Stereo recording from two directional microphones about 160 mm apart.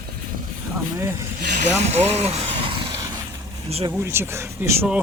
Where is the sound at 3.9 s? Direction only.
15° right (ahead or behind).